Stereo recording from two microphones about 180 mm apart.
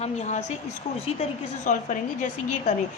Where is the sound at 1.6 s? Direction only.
45° left (ahead or behind).